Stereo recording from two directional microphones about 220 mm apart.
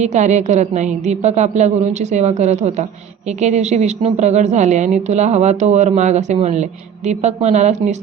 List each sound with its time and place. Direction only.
0.0 s a woman's voice: 30° right (ahead or behind)